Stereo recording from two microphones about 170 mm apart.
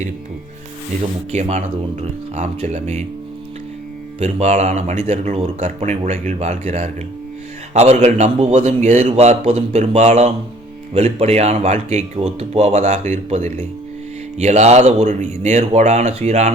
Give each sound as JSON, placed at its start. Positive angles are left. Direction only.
{"t": 1.3, "sound": "speech", "side_deg": -40}
{"t": 4.2, "sound": "speech", "side_deg": -40}